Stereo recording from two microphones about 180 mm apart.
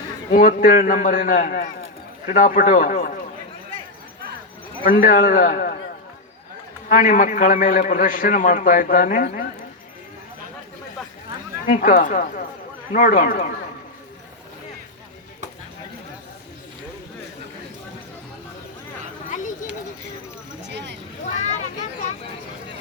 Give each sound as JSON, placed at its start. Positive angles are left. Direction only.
{"t": 0.3, "sound": "a man's voice", "side_deg": 50}
{"t": 4.8, "sound": "a man's voice", "side_deg": 50}
{"t": 6.8, "sound": "a man's voice", "side_deg": 45}
{"t": 11.6, "sound": "a man's voice", "side_deg": 50}
{"t": 20.7, "sound": "a sound", "side_deg": -70}
{"t": 21.3, "sound": "vehicle", "side_deg": 40}